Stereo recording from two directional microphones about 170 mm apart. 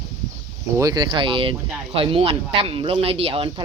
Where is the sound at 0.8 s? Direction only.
20° right (ahead or behind).